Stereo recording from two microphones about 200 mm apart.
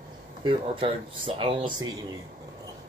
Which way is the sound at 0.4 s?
25° right (ahead or behind).